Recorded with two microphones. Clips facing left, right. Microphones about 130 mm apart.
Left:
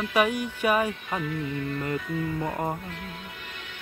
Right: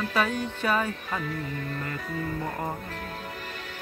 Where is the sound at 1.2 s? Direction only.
40° right (ahead or behind).